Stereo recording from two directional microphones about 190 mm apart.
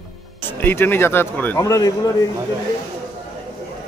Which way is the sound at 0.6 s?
10° left (ahead or behind).